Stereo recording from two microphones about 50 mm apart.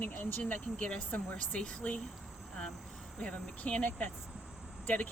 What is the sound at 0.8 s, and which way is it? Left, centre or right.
Speech, left.